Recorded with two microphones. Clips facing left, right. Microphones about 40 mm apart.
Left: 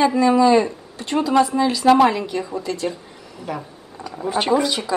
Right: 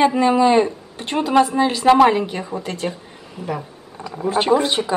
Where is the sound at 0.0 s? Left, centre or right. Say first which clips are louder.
Even; right.